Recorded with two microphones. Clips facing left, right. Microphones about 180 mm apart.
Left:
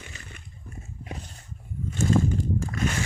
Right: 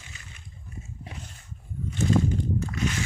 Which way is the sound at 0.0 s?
55° left (ahead or behind).